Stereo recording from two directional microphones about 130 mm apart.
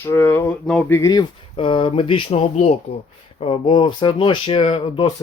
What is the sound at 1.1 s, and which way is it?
Speech, 40° left (ahead or behind).